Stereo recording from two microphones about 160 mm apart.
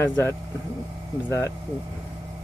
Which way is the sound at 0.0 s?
15° left (ahead or behind).